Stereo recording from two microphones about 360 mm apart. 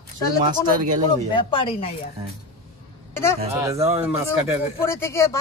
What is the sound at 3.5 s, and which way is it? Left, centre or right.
Speech, centre.